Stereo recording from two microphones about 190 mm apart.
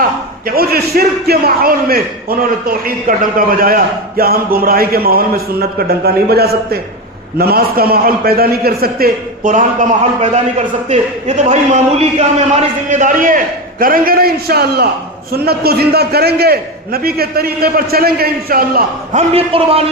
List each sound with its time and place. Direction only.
0.5 s a man's voice: 55° right (ahead or behind)
10.8 s a man's voice: 35° right (ahead or behind); by 18.8 s 50° right (ahead or behind)
19.1 s a man's voice: 30° right (ahead or behind)